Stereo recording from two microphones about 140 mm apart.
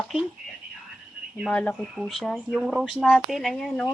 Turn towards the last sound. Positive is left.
turn(degrees=5)  # may be behind; listen again after turning